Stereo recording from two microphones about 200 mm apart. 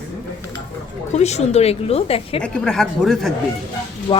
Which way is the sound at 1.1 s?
35° left (ahead or behind).